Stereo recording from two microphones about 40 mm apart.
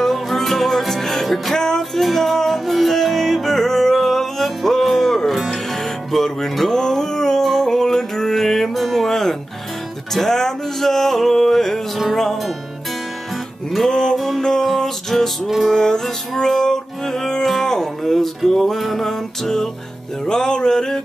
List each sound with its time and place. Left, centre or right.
0.0 s music: centre
1.5 s music: centre
1.8 s music: centre
13.8 s music: centre
14.1 s music: centre
15.7 s music: centre